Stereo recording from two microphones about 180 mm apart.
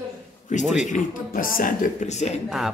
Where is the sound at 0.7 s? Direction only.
45° left (ahead or behind).